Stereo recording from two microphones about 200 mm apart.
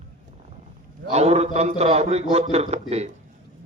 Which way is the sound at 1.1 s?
35° right (ahead or behind).